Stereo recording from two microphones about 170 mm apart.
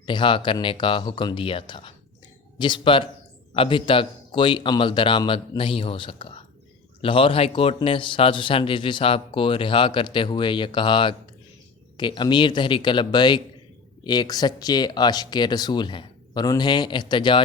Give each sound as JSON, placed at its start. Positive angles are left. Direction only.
{"t": 0.0, "sound": "a man's voice", "side_deg": 30}